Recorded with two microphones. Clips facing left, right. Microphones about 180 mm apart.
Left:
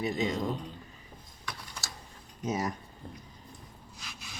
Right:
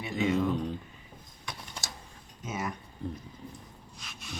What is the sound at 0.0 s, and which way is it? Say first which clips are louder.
Speech: right 1 dB; 40° left (ahead or behind).